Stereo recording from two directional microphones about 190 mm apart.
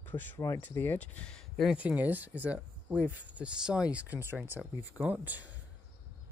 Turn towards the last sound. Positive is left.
turn(degrees=-10)  # may be behind; listen again after turning